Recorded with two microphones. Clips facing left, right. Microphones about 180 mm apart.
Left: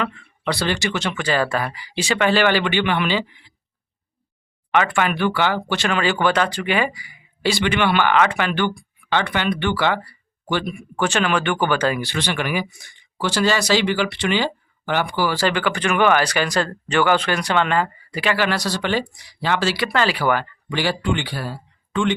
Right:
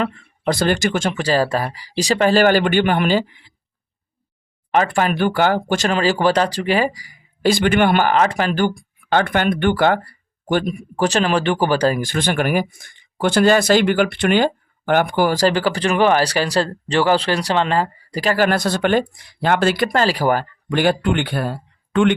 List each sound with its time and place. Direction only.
0.0 s speech: 40° right (ahead or behind)
4.7 s speech: 35° right (ahead or behind); by 22.1 s 55° right (ahead or behind)